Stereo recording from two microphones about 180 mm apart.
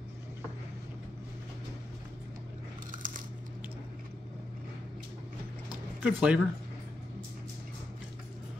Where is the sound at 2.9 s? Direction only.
50° right (ahead or behind).